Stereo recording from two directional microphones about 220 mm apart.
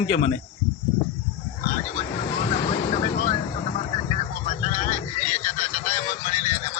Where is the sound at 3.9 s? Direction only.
25° left (ahead or behind).